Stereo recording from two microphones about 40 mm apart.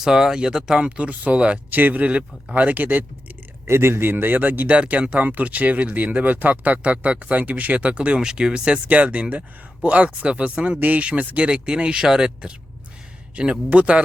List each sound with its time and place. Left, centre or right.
0.0 s speech: centre
0.9 s speech: right
1.7 s speech: right
2.0 s speech: right
3.8 s speech: right
4.7 s speech: right
8.2 s speech: right
8.9 s speech: right